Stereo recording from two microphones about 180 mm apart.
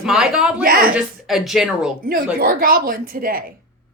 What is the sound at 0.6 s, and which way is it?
Speech, 55° right (ahead or behind).